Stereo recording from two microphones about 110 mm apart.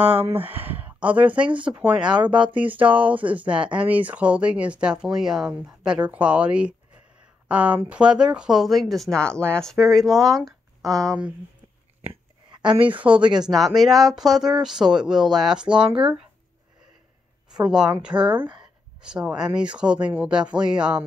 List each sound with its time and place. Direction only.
0.0 s speech: 15° right (ahead or behind); by 10.3 s centre (ahead or behind)
11.1 s speech: 10° right (ahead or behind)
13.0 s speech: 10° right (ahead or behind)
15.9 s speech: 45° right (ahead or behind)
17.6 s speech: 5° right (ahead or behind)